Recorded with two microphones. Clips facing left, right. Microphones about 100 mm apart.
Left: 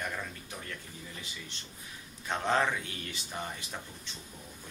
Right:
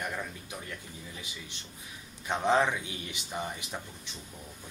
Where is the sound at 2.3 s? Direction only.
15° right (ahead or behind).